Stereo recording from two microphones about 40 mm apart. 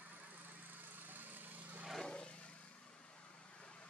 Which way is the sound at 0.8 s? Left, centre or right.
Right.